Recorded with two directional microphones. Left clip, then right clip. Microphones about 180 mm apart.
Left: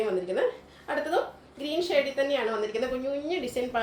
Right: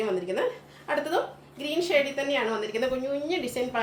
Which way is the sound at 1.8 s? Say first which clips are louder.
Right 1 dB; 15° right (ahead or behind).